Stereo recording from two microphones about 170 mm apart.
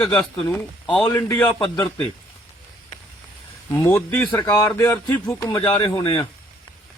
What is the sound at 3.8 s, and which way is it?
A man's voice, 15° left (ahead or behind).